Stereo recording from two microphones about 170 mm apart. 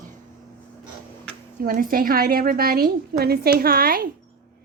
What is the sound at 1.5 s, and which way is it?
A woman's voice, 55° right (ahead or behind).